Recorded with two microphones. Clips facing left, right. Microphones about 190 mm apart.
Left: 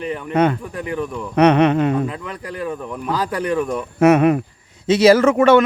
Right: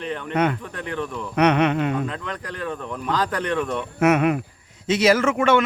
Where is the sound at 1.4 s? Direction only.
35° left (ahead or behind).